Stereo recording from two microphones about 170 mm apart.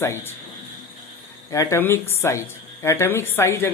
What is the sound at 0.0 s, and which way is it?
Speech, 15° left (ahead or behind).